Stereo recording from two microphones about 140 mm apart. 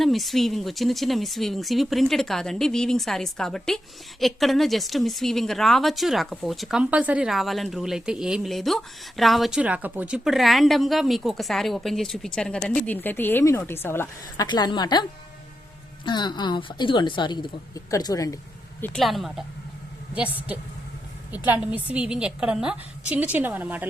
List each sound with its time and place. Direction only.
0.0 s a woman's voice: centre (ahead or behind); by 14.4 s 15° left (ahead or behind)
14.4 s a woman's voice: 35° left (ahead or behind)
16.0 s a woman's voice: 30° left (ahead or behind)
18.9 s speech: centre (ahead or behind)
21.3 s a woman's voice: 10° right (ahead or behind)